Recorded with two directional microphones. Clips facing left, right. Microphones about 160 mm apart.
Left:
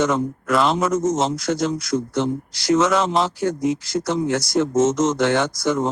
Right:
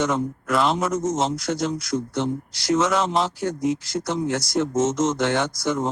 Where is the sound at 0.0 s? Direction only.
90° left.